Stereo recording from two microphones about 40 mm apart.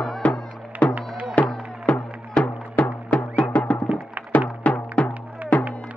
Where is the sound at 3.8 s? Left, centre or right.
Right.